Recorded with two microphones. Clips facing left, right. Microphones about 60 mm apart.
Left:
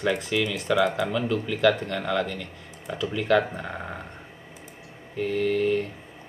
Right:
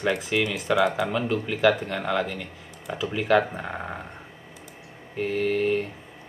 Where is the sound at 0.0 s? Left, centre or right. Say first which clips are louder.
Even; centre.